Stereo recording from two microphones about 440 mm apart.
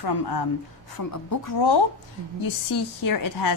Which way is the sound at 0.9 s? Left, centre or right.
Left.